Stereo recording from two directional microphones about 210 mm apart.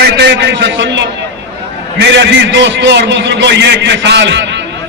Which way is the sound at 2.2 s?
55° right (ahead or behind).